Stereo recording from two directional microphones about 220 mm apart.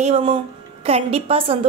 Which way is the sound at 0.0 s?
25° right (ahead or behind).